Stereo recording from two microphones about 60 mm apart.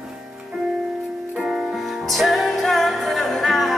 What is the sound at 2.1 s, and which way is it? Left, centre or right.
Music, centre.